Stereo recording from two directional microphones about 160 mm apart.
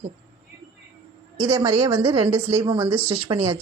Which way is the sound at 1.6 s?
20° right (ahead or behind).